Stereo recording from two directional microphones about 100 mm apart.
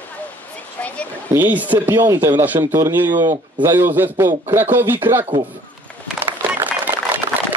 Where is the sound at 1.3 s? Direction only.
15° right (ahead or behind).